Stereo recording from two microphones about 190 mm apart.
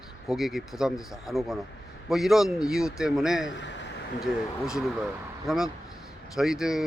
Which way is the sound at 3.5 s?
65° left (ahead or behind).